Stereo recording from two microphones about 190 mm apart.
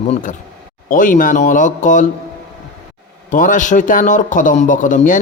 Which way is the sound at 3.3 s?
45° left (ahead or behind).